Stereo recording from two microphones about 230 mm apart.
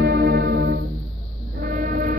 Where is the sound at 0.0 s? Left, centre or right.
Right.